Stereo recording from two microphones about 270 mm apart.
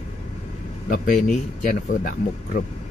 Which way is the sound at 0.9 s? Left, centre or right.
Left.